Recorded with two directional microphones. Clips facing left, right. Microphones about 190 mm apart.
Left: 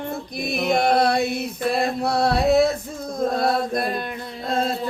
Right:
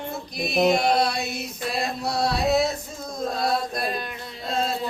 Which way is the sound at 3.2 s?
55° left (ahead or behind).